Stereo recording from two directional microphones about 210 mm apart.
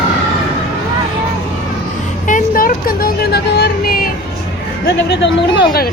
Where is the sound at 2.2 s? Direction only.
40° left (ahead or behind).